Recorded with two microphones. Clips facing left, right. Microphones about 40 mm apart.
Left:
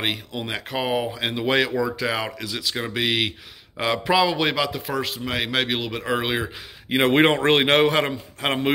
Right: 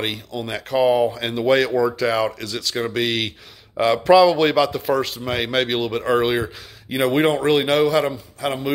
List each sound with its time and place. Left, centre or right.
0.0 s a man's voice: centre
6.9 s a man's voice: left